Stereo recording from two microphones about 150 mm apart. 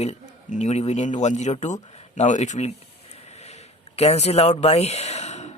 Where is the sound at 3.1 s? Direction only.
45° left (ahead or behind).